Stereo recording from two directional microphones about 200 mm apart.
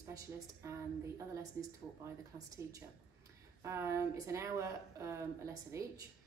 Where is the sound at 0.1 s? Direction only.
15° right (ahead or behind).